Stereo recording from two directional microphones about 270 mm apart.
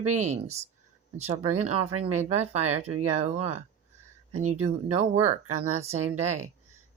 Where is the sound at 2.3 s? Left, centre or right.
Right.